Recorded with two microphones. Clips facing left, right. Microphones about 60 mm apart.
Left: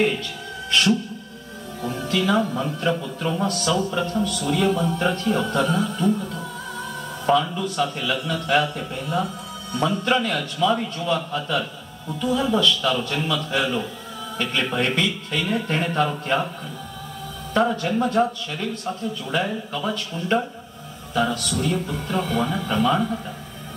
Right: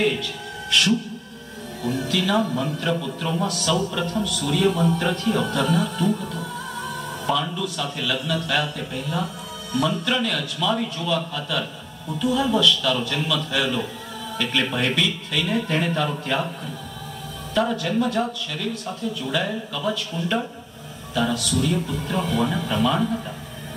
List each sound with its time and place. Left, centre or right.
0.0 s music: left
1.8 s a man's voice: left
17.6 s a man's voice: left